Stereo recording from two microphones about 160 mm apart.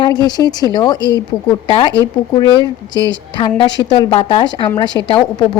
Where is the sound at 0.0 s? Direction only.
25° left (ahead or behind).